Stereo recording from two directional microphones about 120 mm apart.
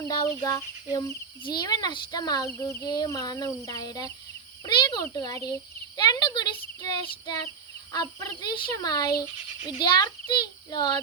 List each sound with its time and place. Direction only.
0.1 s speech: 30° left (ahead or behind)
2.6 s speech: 25° left (ahead or behind)
2.9 s speech: 35° left (ahead or behind)